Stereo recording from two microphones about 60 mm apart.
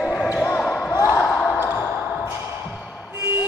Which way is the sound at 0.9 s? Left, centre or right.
Left.